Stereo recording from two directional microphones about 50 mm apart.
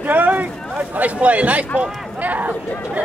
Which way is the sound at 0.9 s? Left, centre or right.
Right.